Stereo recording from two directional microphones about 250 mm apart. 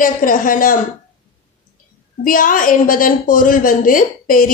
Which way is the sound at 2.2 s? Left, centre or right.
Left.